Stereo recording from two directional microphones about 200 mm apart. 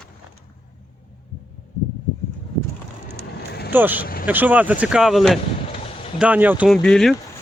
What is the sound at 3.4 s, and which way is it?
Vehicle, 55° left (ahead or behind).